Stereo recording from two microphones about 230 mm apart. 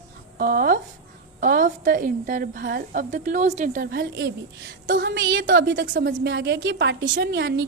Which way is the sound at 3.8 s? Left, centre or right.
Right.